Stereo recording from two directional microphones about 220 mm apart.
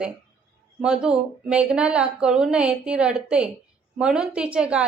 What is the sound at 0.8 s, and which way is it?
A woman's voice, 5° right (ahead or behind).